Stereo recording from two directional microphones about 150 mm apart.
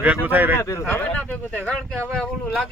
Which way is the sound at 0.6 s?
20° left (ahead or behind).